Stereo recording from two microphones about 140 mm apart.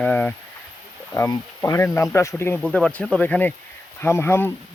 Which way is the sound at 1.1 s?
25° left (ahead or behind).